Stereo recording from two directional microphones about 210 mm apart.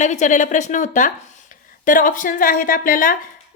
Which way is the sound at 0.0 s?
35° left (ahead or behind).